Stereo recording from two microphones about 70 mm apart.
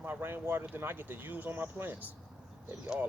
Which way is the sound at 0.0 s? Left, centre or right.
Right.